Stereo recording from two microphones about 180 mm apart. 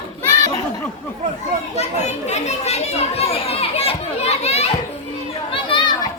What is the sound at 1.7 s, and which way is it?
Children playing, 40° left (ahead or behind).